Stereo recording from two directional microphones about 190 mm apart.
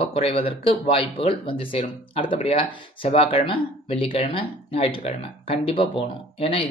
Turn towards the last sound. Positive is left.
turn(degrees=30)  # may be behind; listen again after turning